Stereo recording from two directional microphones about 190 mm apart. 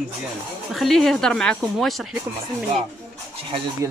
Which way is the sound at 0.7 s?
Centre (ahead or behind).